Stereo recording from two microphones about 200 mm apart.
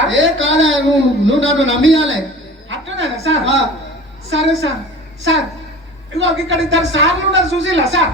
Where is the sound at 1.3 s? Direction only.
65° right (ahead or behind).